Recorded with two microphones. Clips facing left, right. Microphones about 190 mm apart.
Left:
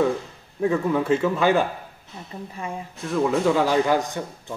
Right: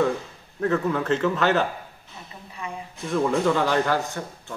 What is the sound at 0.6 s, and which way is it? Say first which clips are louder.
A man's voice: left 2 dB; 10° left (ahead or behind).